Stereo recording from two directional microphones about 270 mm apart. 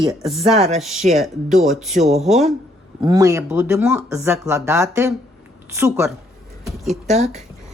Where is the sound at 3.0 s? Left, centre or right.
Centre.